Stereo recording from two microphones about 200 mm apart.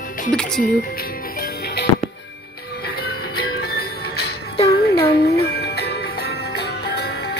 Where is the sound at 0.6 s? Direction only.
45° left (ahead or behind).